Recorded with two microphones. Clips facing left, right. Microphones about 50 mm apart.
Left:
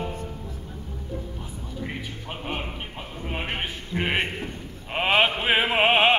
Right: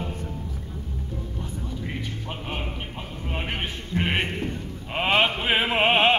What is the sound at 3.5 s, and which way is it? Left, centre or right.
Sheep, centre.